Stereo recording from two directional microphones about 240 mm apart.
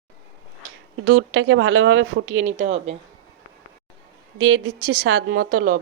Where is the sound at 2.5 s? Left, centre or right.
Right.